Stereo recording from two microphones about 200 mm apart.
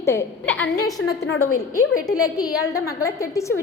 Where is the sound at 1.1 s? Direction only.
90° left.